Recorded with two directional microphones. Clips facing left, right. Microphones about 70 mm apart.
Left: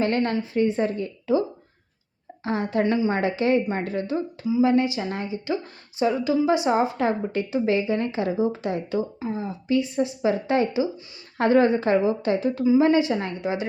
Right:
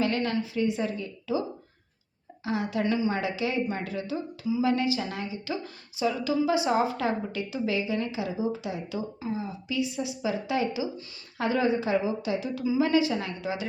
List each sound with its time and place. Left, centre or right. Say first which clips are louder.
0.0 s a woman's voice: left 4 dB; left